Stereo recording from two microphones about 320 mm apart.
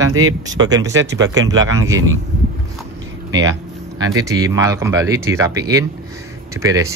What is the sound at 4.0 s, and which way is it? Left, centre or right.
Speech, centre.